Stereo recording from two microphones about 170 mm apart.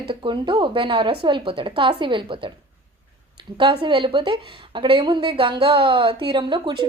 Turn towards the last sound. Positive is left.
turn(degrees=-30)  # may be behind; listen again after turning